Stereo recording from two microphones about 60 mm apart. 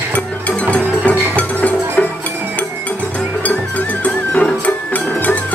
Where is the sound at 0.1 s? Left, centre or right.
Left.